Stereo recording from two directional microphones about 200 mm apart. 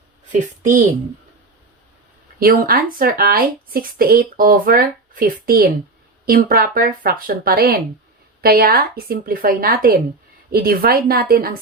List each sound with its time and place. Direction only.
0.3 s a woman's voice: 40° right (ahead or behind)
2.4 s speech: 45° right (ahead or behind)